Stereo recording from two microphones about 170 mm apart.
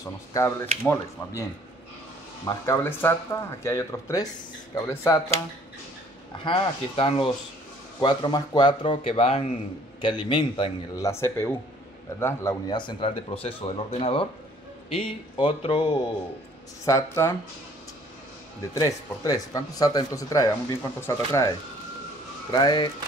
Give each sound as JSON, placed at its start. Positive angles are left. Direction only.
{"t": 0.0, "sound": "speech", "side_deg": 15}
{"t": 2.4, "sound": "speech", "side_deg": 15}
{"t": 6.3, "sound": "speech", "side_deg": 30}
{"t": 11.1, "sound": "speech", "side_deg": 15}
{"t": 12.7, "sound": "speech", "side_deg": 30}
{"t": 18.8, "sound": "speech", "side_deg": 20}